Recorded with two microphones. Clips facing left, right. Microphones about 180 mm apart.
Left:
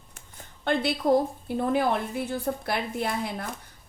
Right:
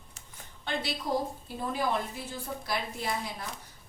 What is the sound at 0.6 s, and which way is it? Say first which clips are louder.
A woman's voice: left 9 dB; 55° left (ahead or behind).